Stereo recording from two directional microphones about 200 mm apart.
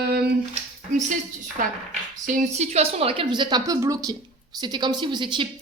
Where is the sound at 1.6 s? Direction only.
40° right (ahead or behind).